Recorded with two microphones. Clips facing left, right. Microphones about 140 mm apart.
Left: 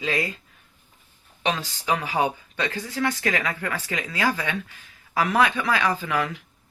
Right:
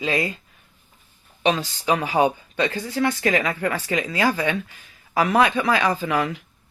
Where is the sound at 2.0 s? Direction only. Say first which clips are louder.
Right 5 dB; 25° right (ahead or behind).